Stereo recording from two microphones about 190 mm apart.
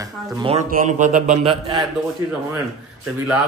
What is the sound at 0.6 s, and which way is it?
Speech, 45° right (ahead or behind).